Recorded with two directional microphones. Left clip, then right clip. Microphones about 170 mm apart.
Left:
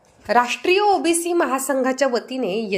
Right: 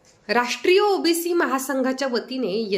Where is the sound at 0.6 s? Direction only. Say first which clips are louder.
Left 1 dB; 10° left (ahead or behind).